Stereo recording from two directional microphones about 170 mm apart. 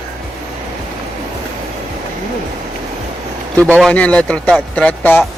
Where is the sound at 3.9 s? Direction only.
10° left (ahead or behind).